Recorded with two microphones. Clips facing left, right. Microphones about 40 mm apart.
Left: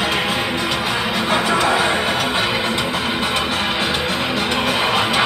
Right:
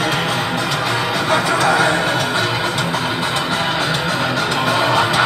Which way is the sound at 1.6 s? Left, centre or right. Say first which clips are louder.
Right 2 dB; left.